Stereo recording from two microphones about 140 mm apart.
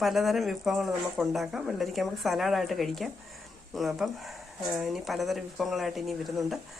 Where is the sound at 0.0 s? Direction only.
Centre (ahead or behind).